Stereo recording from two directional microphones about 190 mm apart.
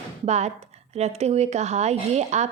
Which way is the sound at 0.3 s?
35° right (ahead or behind).